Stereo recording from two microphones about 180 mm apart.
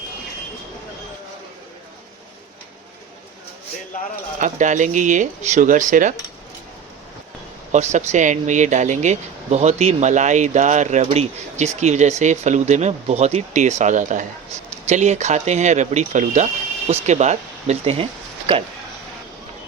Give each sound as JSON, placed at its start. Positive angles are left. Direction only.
{"t": 4.4, "sound": "speech", "side_deg": -45}
{"t": 7.7, "sound": "speech", "side_deg": -40}